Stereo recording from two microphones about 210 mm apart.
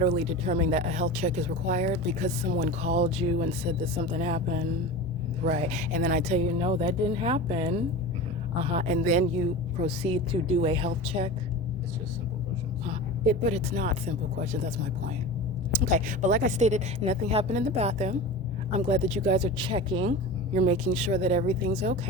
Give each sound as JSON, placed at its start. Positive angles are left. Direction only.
{"t": 0.0, "sound": "speech", "side_deg": -30}
{"t": 13.4, "sound": "speech", "side_deg": -35}
{"t": 15.9, "sound": "speech", "side_deg": -35}
{"t": 20.1, "sound": "speech", "side_deg": -35}